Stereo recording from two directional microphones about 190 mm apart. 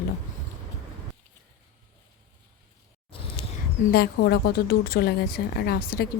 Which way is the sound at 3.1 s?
30° left (ahead or behind).